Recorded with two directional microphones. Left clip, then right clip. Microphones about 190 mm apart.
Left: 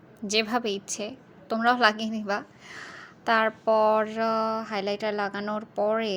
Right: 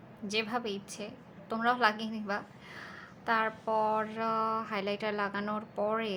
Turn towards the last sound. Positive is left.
turn(degrees=25)  # may be behind; listen again after turning